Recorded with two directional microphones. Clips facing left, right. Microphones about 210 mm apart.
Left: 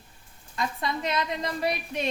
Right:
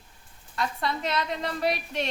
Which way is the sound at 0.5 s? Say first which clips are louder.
Even; 15° left (ahead or behind).